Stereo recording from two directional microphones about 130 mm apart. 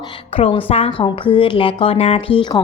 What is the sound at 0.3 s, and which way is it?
A woman's voice, 50° left (ahead or behind).